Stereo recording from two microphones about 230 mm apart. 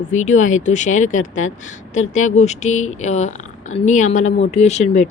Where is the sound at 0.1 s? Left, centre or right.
Left.